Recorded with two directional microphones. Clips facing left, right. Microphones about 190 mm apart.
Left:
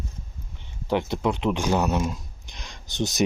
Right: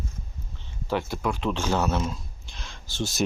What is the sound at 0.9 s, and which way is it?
Speech, 20° left (ahead or behind).